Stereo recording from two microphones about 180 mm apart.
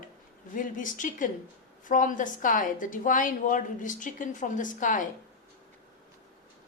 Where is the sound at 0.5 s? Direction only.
45° left (ahead or behind).